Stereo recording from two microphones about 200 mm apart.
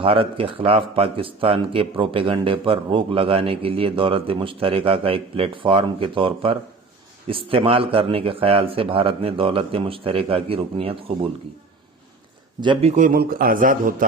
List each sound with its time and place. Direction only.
0.0 s speech: 25° right (ahead or behind)
12.5 s speech: 25° right (ahead or behind)
13.0 s a man's voice: 45° right (ahead or behind)